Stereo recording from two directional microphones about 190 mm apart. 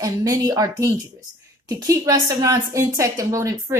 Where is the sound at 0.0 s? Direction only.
20° right (ahead or behind).